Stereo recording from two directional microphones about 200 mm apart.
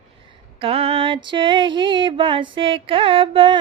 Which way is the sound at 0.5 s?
30° right (ahead or behind).